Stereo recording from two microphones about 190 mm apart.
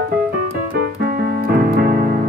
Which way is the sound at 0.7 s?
50° right (ahead or behind).